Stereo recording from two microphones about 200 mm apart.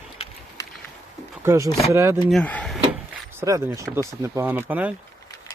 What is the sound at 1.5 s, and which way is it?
Speech, 15° right (ahead or behind).